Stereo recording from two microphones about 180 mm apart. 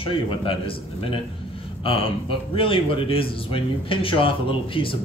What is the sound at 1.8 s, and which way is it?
Speech, 30° left (ahead or behind).